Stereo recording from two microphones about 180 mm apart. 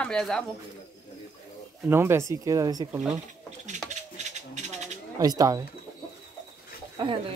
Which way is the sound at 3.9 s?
40° right (ahead or behind).